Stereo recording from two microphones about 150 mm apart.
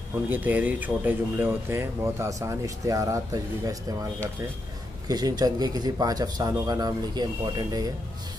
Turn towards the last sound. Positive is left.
turn(degrees=-25)  # may be behind; listen again after turning